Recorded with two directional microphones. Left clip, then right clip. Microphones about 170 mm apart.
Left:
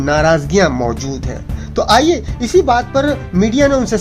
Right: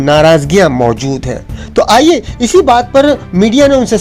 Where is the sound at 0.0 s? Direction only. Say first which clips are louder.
Right 6 dB; 25° right (ahead or behind).